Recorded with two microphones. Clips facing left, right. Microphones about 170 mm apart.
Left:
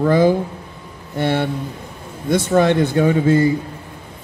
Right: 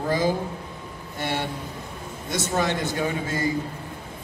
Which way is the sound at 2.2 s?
55° left (ahead or behind).